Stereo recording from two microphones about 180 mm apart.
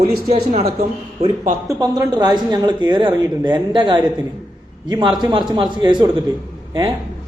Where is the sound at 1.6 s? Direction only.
20° right (ahead or behind).